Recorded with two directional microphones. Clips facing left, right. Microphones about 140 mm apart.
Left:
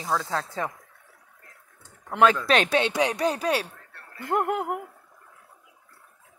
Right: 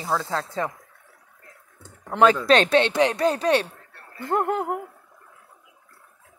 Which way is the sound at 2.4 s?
10° left (ahead or behind).